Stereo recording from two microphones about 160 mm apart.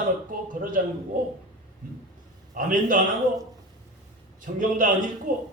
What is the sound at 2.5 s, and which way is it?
Speech, 55° right (ahead or behind).